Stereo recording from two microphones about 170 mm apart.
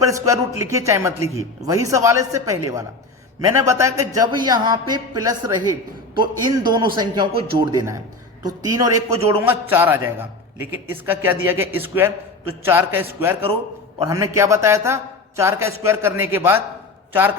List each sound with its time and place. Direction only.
0.0 s a man's voice: 20° right (ahead or behind)